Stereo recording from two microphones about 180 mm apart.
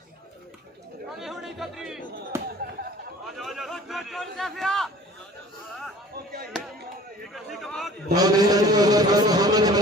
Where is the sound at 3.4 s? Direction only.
Centre (ahead or behind).